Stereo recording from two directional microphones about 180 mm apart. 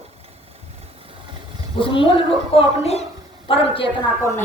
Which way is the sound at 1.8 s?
30° left (ahead or behind).